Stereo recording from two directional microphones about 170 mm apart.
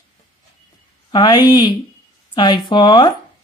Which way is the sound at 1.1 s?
25° left (ahead or behind).